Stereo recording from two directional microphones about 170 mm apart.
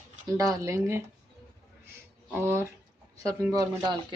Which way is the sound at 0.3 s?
20° right (ahead or behind).